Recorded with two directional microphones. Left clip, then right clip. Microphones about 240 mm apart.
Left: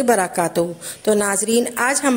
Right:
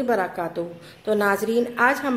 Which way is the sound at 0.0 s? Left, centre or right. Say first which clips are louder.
Left 6 dB; left.